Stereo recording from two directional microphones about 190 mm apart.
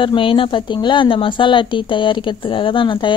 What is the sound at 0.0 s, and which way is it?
A woman's voice, 25° left (ahead or behind).